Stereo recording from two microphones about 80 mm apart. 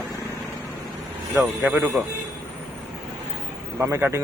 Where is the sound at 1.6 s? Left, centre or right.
Right.